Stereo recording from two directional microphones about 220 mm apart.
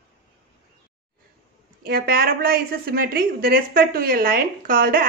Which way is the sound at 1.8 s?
45° right (ahead or behind).